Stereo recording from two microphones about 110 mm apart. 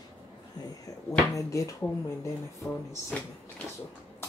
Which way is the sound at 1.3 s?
30° left (ahead or behind).